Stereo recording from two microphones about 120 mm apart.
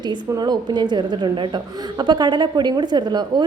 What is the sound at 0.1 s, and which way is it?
A woman's voice, 35° right (ahead or behind).